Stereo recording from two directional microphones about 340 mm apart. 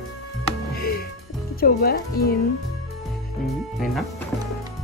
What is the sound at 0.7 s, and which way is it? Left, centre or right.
Music, left.